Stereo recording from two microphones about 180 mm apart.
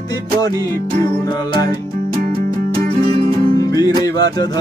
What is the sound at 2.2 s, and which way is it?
Music, 55° right (ahead or behind).